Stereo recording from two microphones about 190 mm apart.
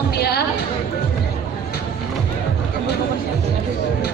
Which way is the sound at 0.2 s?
55° left (ahead or behind).